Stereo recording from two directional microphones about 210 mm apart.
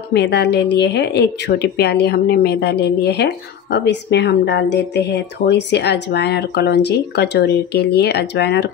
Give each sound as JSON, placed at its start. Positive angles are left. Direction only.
{"t": 0.1, "sound": "speech", "side_deg": 50}